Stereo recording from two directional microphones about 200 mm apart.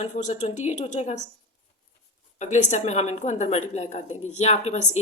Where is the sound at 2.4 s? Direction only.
35° left (ahead or behind).